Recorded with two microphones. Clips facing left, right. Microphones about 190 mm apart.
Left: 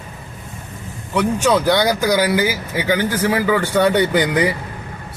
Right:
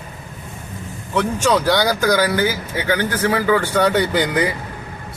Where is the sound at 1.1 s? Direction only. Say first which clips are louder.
Left 1 dB; 5° left (ahead or behind).